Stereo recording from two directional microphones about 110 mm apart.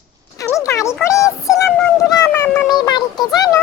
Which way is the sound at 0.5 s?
30° left (ahead or behind).